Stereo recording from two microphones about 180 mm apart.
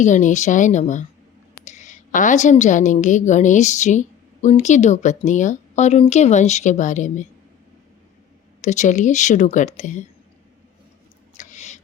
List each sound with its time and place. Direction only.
0.0 s a woman's voice: 45° left (ahead or behind)
8.6 s a woman's voice: 40° left (ahead or behind)
11.3 s a sound: 40° left (ahead or behind)